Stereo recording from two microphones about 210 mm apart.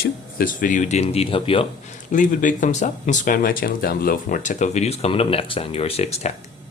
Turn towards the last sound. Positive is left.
turn(degrees=30)  # may be behind; listen again after turning